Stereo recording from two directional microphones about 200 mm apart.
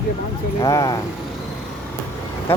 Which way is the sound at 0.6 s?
15° left (ahead or behind).